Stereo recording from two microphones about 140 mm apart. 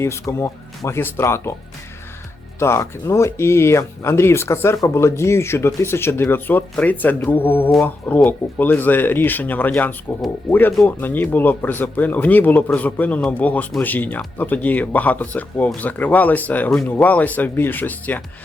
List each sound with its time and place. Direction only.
0.0 s speech: 20° left (ahead or behind)
2.6 s speech: 20° left (ahead or behind)